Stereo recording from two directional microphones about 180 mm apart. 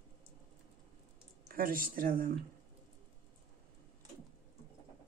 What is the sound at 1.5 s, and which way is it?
Speech, 50° right (ahead or behind).